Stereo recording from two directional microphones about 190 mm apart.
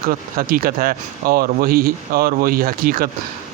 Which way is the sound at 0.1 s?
50° right (ahead or behind).